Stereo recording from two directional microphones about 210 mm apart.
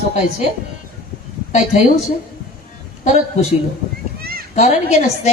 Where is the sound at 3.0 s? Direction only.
35° left (ahead or behind).